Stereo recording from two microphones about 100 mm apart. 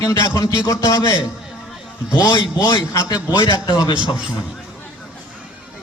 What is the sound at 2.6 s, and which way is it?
A man's voice, 40° left (ahead or behind).